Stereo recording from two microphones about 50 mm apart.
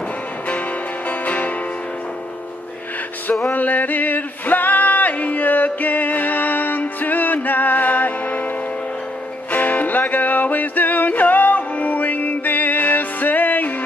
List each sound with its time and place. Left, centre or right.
0.5 s music: left
3.4 s music: left
9.5 s music: left